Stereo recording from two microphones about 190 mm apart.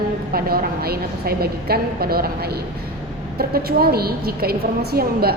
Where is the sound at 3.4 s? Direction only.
55° right (ahead or behind).